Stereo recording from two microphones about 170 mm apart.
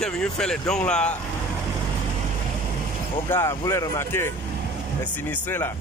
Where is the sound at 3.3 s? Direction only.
20° left (ahead or behind).